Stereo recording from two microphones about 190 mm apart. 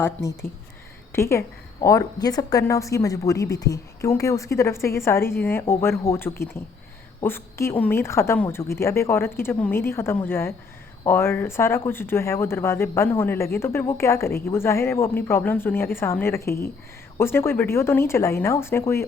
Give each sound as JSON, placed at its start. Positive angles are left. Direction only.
{"t": 0.0, "sound": "speech", "side_deg": 15}